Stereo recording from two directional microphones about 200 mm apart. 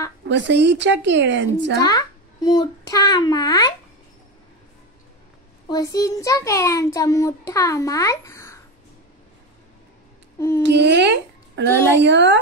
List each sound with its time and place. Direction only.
0.3 s a child's voice: 60° right (ahead or behind)
1.8 s a child's voice: 20° left (ahead or behind)
5.7 s a child's voice: 20° left (ahead or behind)
10.6 s a child's voice: 60° right (ahead or behind)